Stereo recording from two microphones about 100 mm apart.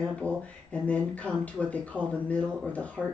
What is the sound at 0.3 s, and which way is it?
Speech, 15° left (ahead or behind).